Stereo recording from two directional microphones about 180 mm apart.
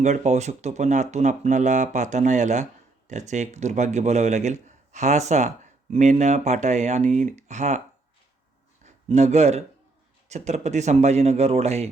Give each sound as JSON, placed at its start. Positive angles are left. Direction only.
{"t": 0.0, "sound": "a man's voice", "side_deg": -40}
{"t": 8.8, "sound": "a man's voice", "side_deg": -40}